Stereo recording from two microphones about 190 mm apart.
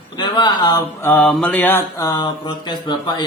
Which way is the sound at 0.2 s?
25° left (ahead or behind).